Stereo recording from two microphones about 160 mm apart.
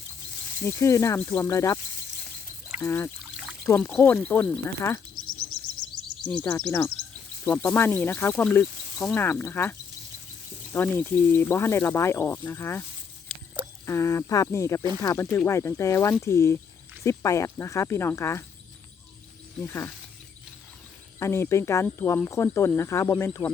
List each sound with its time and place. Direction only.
0.6 s speech: 20° left (ahead or behind)
2.8 s speech: 15° left (ahead or behind)
6.2 s speech: 5° left (ahead or behind)
13.3 s a sound: centre (ahead or behind)
13.8 s speech: 20° left (ahead or behind)
19.5 s speech: 15° left (ahead or behind)
21.2 s speech: 15° left (ahead or behind)